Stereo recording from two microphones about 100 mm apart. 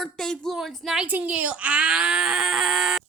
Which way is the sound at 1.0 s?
15° right (ahead or behind).